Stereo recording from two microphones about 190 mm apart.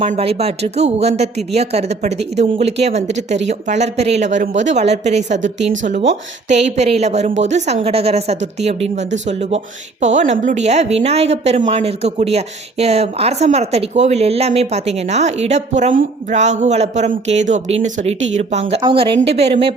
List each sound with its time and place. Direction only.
0.0 s a woman's voice: 30° right (ahead or behind)
6.5 s a woman's voice: 35° right (ahead or behind)